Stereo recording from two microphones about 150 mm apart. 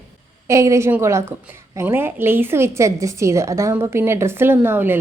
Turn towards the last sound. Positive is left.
turn(degrees=-15)  # may be behind; listen again after turning